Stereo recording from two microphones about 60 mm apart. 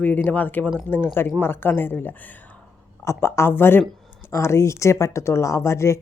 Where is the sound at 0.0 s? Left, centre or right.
Left.